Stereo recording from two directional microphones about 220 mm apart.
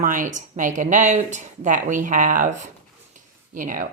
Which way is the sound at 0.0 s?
35° right (ahead or behind).